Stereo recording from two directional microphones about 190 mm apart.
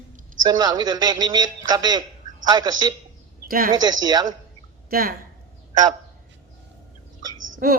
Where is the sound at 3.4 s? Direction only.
50° right (ahead or behind).